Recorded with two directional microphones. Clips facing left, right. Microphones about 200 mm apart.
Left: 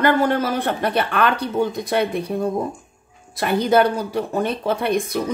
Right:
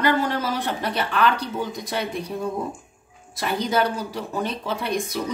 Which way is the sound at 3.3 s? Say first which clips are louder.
Left 6 dB; 55° left (ahead or behind).